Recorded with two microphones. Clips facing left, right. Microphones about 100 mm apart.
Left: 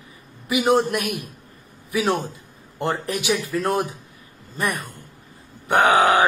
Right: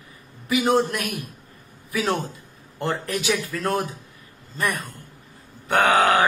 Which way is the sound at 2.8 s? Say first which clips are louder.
Left 1 dB; 15° left (ahead or behind).